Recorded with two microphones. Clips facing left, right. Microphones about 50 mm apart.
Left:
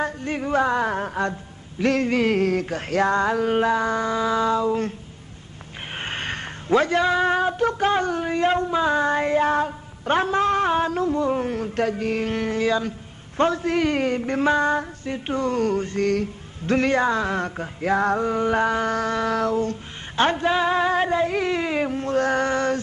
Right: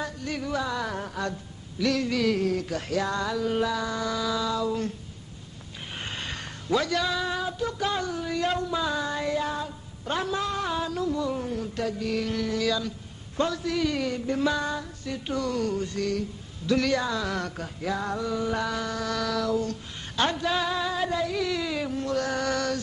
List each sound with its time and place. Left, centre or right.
0.0 s speech: left
5.9 s speech: left